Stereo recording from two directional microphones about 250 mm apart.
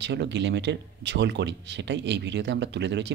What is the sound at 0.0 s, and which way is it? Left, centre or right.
Speech, right.